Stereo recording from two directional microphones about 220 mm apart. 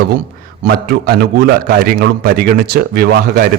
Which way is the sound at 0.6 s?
45° right (ahead or behind).